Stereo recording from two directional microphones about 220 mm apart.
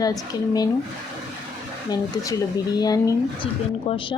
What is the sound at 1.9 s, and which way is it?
A woman's voice, 15° left (ahead or behind).